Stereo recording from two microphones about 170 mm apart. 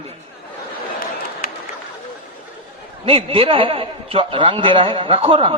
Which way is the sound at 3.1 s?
35° right (ahead or behind).